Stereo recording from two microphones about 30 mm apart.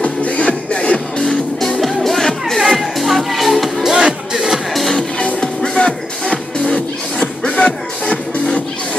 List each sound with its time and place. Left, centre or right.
0.0 s music: left
0.7 s music: left
1.8 s music: centre
2.6 s music: centre
3.8 s music: centre
4.4 s music: centre
5.4 s music: left